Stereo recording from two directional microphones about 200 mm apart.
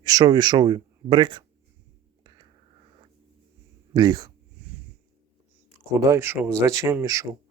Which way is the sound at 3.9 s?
20° right (ahead or behind).